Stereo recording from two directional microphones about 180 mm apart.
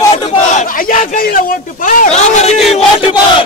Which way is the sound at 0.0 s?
25° left (ahead or behind).